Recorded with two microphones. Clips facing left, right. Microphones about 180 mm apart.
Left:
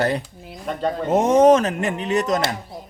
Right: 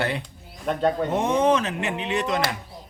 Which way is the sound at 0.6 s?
Centre (ahead or behind).